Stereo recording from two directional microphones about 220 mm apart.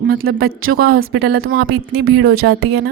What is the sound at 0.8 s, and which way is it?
Speech, 45° right (ahead or behind).